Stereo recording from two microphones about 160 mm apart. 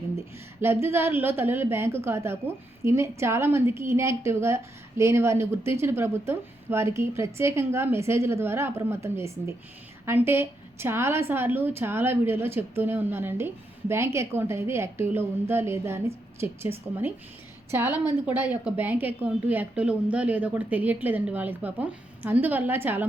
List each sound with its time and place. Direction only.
0.6 s a woman's voice: 15° right (ahead or behind)
17.7 s a woman's voice: 10° right (ahead or behind)